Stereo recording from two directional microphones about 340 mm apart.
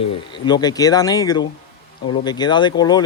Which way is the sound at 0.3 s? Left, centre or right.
Centre.